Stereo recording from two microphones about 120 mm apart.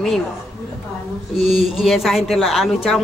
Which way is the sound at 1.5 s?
Centre (ahead or behind).